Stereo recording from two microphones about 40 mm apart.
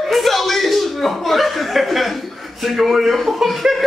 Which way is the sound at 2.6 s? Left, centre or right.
Centre.